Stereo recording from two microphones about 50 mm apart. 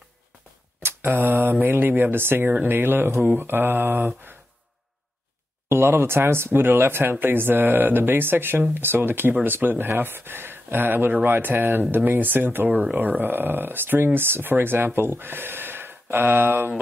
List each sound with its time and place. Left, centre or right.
0.8 s speech: right
2.5 s speech: right
5.7 s speech: right